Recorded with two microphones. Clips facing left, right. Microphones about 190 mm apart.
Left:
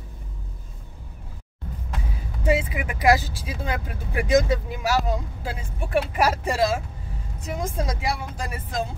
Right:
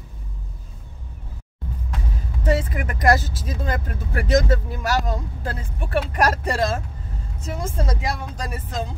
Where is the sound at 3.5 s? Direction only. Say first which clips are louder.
Right 2 dB; 10° left (ahead or behind).